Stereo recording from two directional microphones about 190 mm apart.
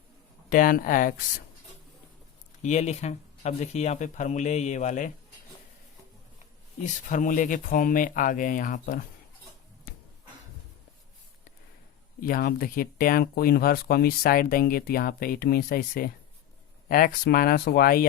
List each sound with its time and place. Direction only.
0.5 s speech: 45° left (ahead or behind)
2.6 s speech: 35° left (ahead or behind)
6.8 s speech: 40° left (ahead or behind)
12.2 s speech: 50° left (ahead or behind)